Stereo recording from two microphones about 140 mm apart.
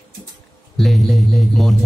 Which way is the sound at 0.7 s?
Centre (ahead or behind).